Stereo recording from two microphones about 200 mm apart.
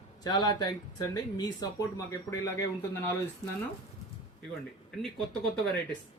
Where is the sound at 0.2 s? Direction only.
20° left (ahead or behind).